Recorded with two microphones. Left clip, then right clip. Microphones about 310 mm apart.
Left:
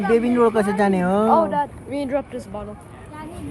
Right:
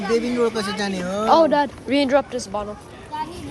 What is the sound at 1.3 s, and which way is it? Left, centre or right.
Speech, right.